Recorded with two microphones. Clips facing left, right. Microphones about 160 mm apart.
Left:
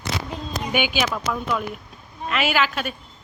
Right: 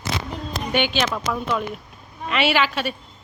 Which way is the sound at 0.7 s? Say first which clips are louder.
Right 1 dB; 5° left (ahead or behind).